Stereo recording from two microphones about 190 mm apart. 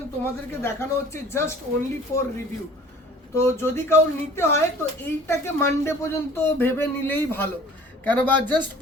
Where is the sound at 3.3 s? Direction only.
15° left (ahead or behind).